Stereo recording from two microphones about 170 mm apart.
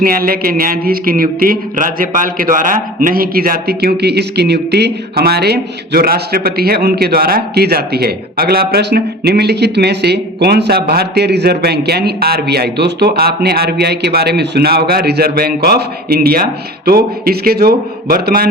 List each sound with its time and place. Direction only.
0.0 s speech: 60° right (ahead or behind)